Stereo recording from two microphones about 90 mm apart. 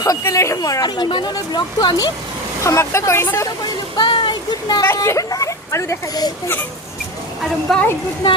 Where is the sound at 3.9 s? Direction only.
60° left (ahead or behind).